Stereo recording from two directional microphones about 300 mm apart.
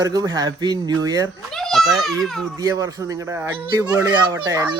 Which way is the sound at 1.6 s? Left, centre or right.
Centre.